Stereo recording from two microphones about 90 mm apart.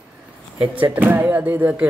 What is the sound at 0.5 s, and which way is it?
Speech, 20° right (ahead or behind).